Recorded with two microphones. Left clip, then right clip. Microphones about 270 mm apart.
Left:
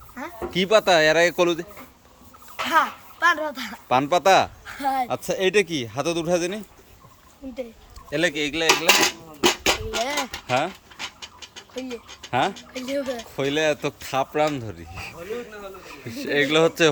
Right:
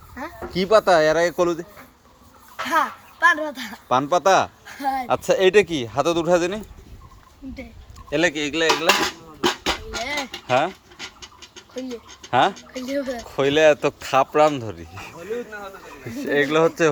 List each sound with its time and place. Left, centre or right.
0.7 s speech: centre
2.6 s speech: centre
8.1 s speech: centre
8.9 s dishes: left
10.0 s a sound: left
10.7 s scratch: centre
12.3 s speech: centre
13.2 s speech: centre
16.1 s speech: centre